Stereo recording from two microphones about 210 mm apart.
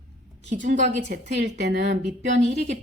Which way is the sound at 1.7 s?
55° right (ahead or behind).